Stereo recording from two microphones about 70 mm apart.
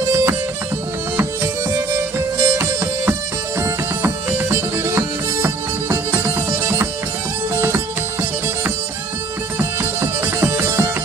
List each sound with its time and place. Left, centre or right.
0.1 s music: right
1.8 s music: right
7.7 s music: right
10.2 s music: right